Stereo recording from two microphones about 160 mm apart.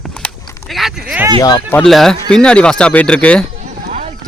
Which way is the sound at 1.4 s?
25° left (ahead or behind).